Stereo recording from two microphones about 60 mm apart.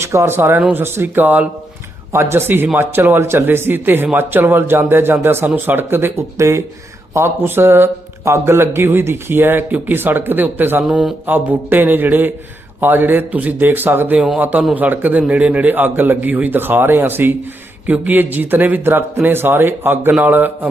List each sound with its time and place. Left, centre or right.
0.0 s speech: right
0.3 s speech: right
6.3 s speech: right
7.4 s a man's voice: right